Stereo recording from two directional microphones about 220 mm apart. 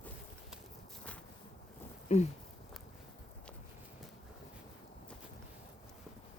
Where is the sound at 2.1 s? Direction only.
30° left (ahead or behind).